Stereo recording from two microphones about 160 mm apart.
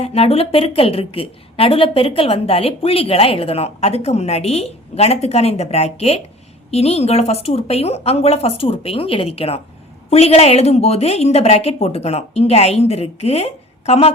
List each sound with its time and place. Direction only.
0.0 s a woman's voice: 40° left (ahead or behind)